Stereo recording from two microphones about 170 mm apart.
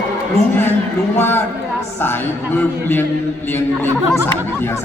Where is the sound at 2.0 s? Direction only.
15° left (ahead or behind).